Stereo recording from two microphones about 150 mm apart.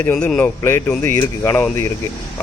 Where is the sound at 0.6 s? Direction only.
15° left (ahead or behind).